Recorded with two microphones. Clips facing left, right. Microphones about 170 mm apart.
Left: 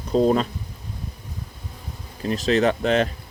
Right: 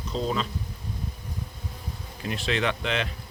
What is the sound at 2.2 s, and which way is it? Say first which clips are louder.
Speech: left 8 dB; 40° left (ahead or behind).